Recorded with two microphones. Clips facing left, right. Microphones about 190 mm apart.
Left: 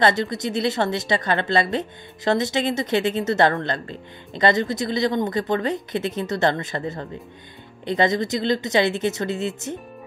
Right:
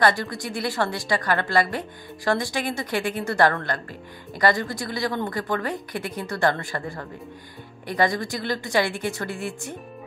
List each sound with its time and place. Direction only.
0.0 s a woman's voice: 20° left (ahead or behind)